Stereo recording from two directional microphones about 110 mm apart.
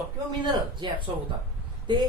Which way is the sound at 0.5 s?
45° right (ahead or behind).